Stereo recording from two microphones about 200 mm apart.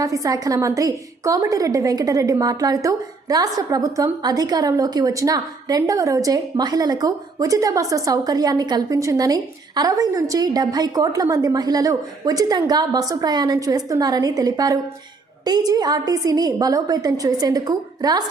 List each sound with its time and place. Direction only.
0.0 s a woman's voice: 15° right (ahead or behind)